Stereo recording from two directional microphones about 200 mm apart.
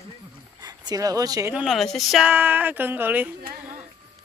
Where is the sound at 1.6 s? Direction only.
Centre (ahead or behind).